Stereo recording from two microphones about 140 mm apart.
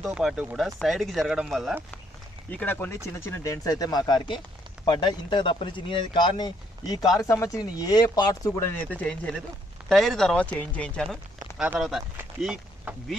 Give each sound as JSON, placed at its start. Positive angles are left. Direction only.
{"t": 0.0, "sound": "speech", "side_deg": 0}
{"t": 2.5, "sound": "speech", "side_deg": 15}
{"t": 8.7, "sound": "speech", "side_deg": 10}